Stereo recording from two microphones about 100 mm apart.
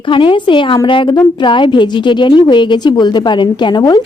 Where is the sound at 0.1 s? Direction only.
55° left (ahead or behind).